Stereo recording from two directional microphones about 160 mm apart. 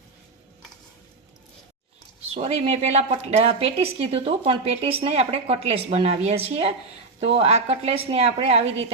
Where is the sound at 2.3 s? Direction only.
40° right (ahead or behind).